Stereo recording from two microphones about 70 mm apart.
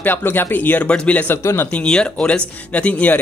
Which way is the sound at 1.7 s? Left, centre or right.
Centre.